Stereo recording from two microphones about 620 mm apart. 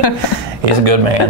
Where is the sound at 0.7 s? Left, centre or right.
Right.